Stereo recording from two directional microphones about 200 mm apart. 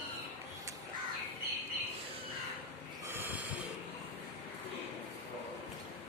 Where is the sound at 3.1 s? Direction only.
10° right (ahead or behind).